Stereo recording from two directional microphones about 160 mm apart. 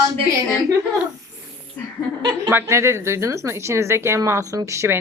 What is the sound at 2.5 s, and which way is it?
Speech, 15° right (ahead or behind).